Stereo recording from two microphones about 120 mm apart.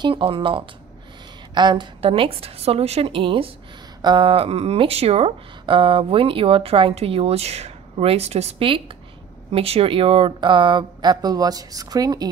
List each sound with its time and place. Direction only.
0.0 s a woman's voice: 45° right (ahead or behind)
2.0 s speech: 50° right (ahead or behind); by 12.3 s 30° right (ahead or behind)